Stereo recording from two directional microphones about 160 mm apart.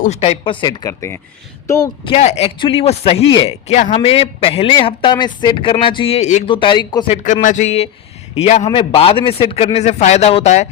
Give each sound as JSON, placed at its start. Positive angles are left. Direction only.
{"t": 0.0, "sound": "speech", "side_deg": 40}
{"t": 2.0, "sound": "a man's voice", "side_deg": 40}
{"t": 3.8, "sound": "speech", "side_deg": 50}
{"t": 4.0, "sound": "a man's voice", "side_deg": 35}
{"t": 6.5, "sound": "a man's voice", "side_deg": 30}
{"t": 7.1, "sound": "a man's voice", "side_deg": 50}